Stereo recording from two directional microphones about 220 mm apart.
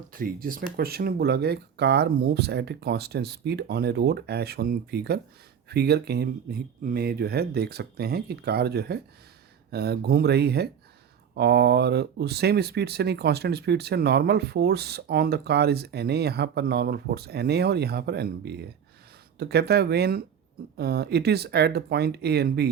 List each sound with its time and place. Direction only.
0.1 s speech: 40° right (ahead or behind)